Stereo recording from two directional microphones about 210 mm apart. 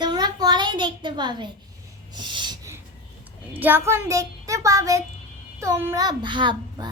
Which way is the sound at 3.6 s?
10° right (ahead or behind).